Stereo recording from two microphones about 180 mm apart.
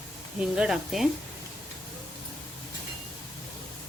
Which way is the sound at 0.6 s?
Centre (ahead or behind).